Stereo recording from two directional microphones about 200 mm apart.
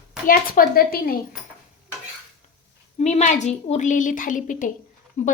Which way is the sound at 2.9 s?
35° left (ahead or behind).